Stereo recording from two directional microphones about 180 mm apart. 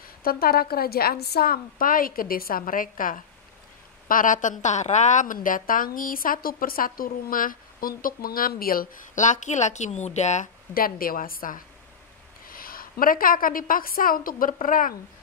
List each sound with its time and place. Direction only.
0.0 s a woman's voice: 55° left (ahead or behind); by 10.5 s 40° left (ahead or behind)
10.7 s a woman's voice: 55° left (ahead or behind)